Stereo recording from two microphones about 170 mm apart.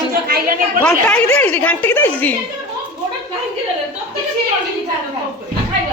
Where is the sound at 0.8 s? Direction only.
5° left (ahead or behind).